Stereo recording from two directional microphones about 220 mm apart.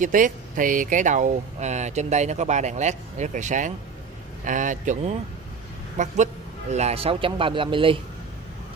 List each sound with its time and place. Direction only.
0.0 s a man's voice: 35° right (ahead or behind)